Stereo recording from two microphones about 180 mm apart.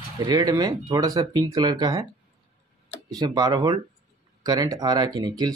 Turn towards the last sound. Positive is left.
turn(degrees=-20)  # may be behind; listen again after turning